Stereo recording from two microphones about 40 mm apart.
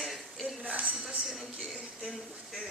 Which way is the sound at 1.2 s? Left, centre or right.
Centre.